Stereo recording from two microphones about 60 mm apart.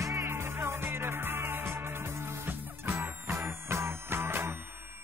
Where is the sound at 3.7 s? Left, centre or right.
Right.